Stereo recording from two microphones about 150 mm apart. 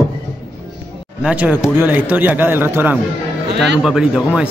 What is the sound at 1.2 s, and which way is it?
Speech, 10° right (ahead or behind).